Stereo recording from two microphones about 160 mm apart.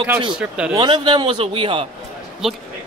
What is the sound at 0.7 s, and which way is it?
A man's voice, 30° right (ahead or behind).